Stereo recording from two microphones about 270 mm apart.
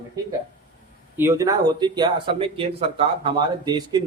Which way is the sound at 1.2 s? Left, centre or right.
Centre.